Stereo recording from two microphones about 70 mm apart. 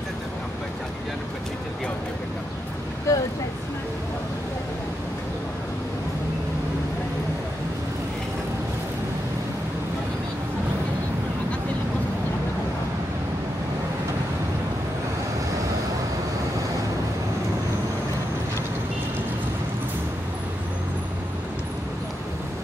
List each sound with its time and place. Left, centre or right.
3.1 s vehicle: left